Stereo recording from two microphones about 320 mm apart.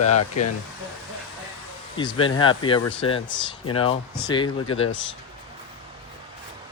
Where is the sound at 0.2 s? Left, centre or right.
Left.